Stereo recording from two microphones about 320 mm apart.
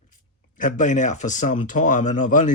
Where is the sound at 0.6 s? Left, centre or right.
Left.